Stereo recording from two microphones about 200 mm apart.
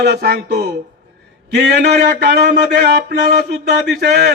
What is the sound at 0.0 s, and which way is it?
A man's voice, 55° right (ahead or behind).